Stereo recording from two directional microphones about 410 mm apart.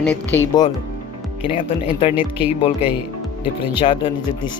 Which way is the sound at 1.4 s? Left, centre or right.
Centre.